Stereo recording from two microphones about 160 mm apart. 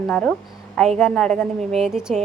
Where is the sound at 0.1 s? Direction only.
5° left (ahead or behind).